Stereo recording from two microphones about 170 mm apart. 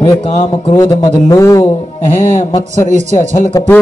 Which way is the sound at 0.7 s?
20° left (ahead or behind).